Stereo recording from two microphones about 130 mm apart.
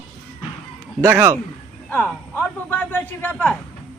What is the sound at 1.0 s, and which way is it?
Speech, 20° right (ahead or behind).